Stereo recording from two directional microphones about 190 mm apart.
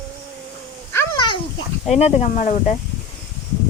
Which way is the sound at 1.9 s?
35° left (ahead or behind).